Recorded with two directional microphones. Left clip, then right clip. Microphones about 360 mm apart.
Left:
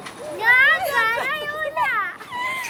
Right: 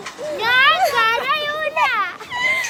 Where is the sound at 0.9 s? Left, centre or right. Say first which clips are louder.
Right 3 dB; centre.